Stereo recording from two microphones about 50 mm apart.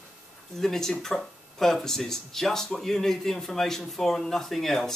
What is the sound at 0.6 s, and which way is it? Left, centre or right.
Speech, centre.